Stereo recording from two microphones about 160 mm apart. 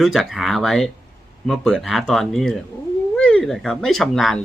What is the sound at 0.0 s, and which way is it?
Speech, centre (ahead or behind).